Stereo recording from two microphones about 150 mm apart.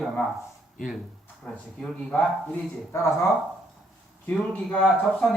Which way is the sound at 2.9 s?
20° left (ahead or behind).